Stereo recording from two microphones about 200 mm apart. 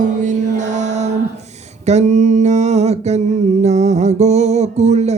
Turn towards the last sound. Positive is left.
turn(degrees=-35)  # may be behind; listen again after turning